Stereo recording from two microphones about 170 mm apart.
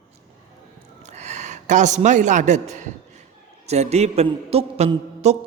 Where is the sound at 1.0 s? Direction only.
40° right (ahead or behind).